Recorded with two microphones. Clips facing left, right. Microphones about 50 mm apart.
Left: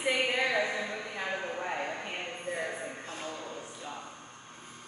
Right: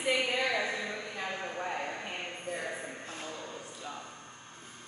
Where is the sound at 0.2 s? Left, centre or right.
Left.